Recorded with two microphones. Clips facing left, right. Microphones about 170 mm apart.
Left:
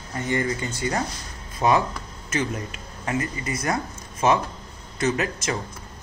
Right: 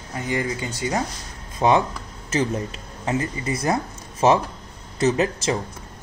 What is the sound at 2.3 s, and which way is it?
Speech, 30° right (ahead or behind).